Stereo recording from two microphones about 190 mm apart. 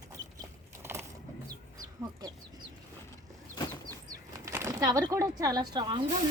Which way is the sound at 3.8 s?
20° right (ahead or behind).